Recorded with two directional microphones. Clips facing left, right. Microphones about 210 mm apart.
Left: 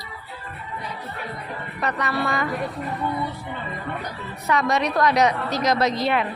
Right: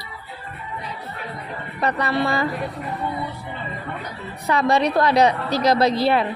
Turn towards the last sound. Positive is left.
turn(degrees=-35)  # may be behind; listen again after turning